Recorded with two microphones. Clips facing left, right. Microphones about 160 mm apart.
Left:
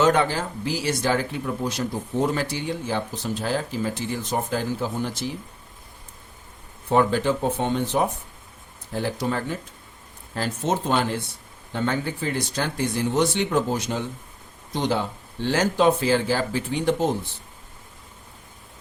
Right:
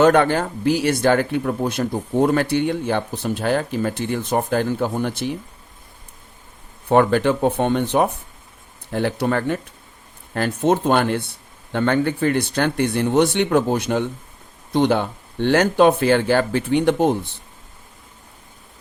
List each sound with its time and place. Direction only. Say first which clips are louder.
0.0 s speech: right 5 dB; 60° right (ahead or behind)
6.8 s speech: right 4 dB; 65° right (ahead or behind)